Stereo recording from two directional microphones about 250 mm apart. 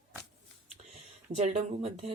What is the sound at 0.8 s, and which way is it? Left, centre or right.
Speech, right.